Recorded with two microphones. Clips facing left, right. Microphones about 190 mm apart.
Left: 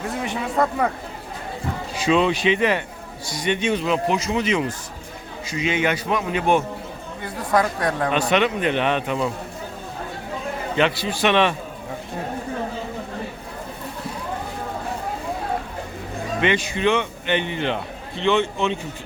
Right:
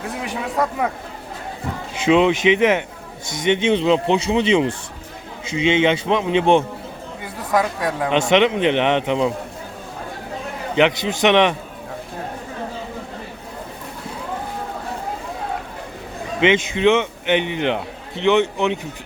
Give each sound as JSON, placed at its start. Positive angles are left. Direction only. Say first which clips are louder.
{"t": 0.1, "sound": "speech", "louder": "even", "side_deg": 0}
{"t": 2.0, "sound": "a man's voice", "louder": "right 4 dB", "side_deg": -20}
{"t": 7.5, "sound": "speech", "louder": "even", "side_deg": -5}
{"t": 8.1, "sound": "a man's voice", "louder": "right 7 dB", "side_deg": -20}
{"t": 10.8, "sound": "a man's voice", "louder": "right 4 dB", "side_deg": -20}
{"t": 16.4, "sound": "a man's voice", "louder": "right 5 dB", "side_deg": -20}